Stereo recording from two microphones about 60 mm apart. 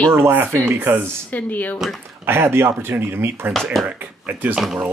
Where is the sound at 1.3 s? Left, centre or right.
Left.